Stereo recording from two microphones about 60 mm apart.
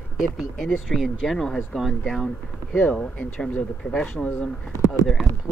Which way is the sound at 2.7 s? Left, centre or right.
Left.